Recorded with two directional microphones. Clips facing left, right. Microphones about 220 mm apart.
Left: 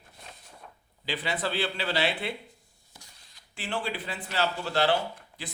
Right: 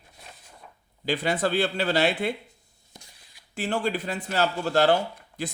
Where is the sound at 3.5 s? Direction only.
45° right (ahead or behind).